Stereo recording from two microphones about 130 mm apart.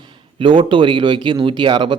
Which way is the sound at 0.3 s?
40° right (ahead or behind).